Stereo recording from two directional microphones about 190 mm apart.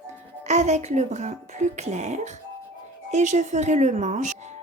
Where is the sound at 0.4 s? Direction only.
35° right (ahead or behind).